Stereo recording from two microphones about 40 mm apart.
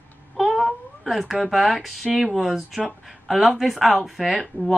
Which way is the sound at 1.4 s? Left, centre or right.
Centre.